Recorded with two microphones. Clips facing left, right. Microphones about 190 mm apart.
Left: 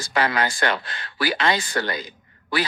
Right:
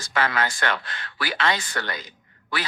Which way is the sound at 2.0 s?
35° left (ahead or behind).